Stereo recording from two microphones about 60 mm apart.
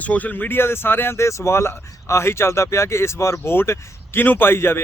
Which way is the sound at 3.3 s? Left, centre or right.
Left.